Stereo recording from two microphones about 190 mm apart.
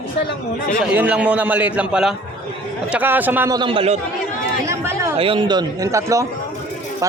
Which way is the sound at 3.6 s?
30° right (ahead or behind).